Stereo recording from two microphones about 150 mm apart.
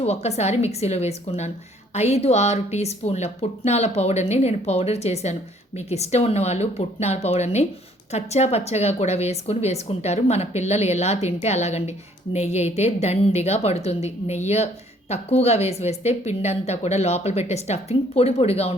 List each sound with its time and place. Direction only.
0.0 s speech: 45° left (ahead or behind)